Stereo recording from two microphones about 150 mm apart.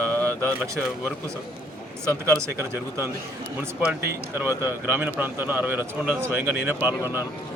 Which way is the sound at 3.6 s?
10° right (ahead or behind).